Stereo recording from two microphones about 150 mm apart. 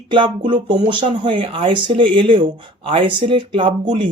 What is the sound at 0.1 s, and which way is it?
Speech, 35° right (ahead or behind).